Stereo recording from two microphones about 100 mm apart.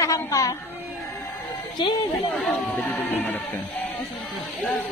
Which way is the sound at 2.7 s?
15° left (ahead or behind).